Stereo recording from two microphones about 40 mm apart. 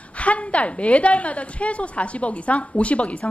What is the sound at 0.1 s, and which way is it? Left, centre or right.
A woman's voice, left.